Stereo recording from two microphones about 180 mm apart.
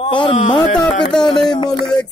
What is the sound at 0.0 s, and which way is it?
Speech, 30° left (ahead or behind).